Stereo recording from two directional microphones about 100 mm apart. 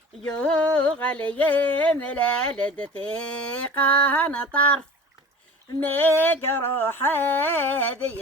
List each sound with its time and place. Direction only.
0.3 s mantra: 10° left (ahead or behind)
5.8 s carnatic music: 20° left (ahead or behind)